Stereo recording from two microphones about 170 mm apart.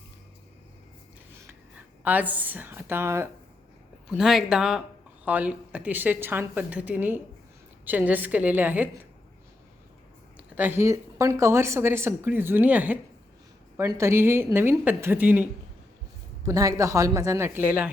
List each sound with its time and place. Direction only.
2.0 s a woman's voice: 10° right (ahead or behind)
4.1 s a woman's voice: centre (ahead or behind)
10.3 s a woman's voice: 10° right (ahead or behind)
16.5 s a woman's voice: 20° right (ahead or behind)